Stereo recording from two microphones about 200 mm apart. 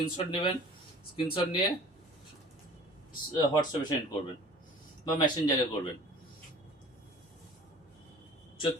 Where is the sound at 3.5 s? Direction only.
20° left (ahead or behind).